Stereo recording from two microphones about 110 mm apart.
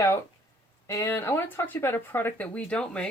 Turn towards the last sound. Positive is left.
turn(degrees=10)  # may be behind; listen again after turning